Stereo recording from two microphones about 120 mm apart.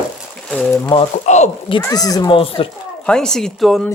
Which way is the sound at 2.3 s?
50° left (ahead or behind).